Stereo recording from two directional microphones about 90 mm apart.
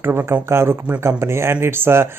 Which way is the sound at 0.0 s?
25° right (ahead or behind).